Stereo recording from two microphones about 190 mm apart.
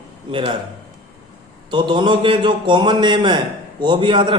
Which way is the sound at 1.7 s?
25° right (ahead or behind).